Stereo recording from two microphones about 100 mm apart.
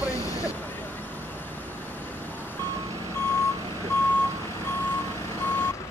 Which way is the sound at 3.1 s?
25° left (ahead or behind).